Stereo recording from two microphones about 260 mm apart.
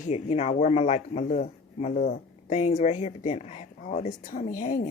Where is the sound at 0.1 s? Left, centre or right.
Left.